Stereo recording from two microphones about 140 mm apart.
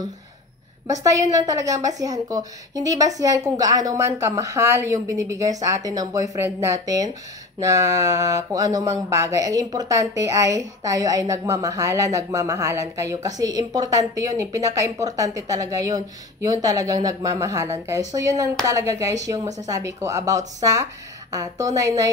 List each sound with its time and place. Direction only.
1.0 s a woman's voice: 25° right (ahead or behind)